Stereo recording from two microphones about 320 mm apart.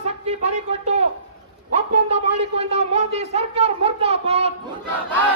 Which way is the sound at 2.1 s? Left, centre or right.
Centre.